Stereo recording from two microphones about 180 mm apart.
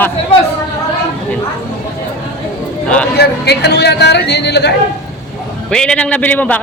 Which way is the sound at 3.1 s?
65° left (ahead or behind).